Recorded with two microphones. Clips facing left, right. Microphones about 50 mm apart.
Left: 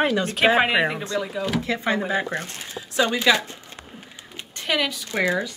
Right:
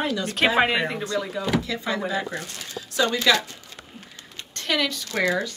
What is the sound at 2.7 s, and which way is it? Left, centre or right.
Speech, centre.